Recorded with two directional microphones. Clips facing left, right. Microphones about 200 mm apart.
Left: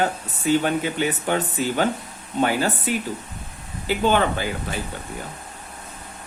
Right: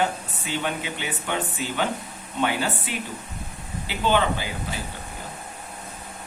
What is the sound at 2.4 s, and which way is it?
A man's voice, 40° left (ahead or behind).